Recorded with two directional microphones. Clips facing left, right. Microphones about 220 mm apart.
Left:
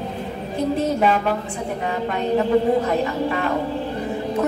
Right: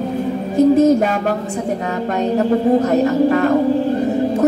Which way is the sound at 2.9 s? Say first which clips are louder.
Right 8 dB; 45° right (ahead or behind).